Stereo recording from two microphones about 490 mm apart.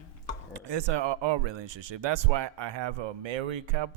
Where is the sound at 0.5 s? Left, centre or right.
Right.